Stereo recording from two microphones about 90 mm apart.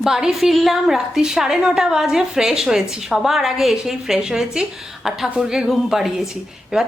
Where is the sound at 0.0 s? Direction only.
5° right (ahead or behind).